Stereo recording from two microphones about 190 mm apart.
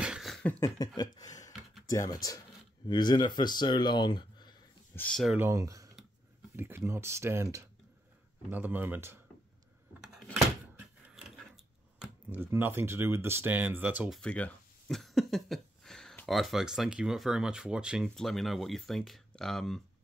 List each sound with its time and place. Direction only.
0.0 s beatboxing: centre (ahead or behind)
0.7 s a sound: 20° left (ahead or behind)
1.9 s speech: 20° left (ahead or behind)
4.9 s speech: 5° left (ahead or behind)
5.5 s speech: 15° right (ahead or behind)
12.0 s speech: 10° right (ahead or behind)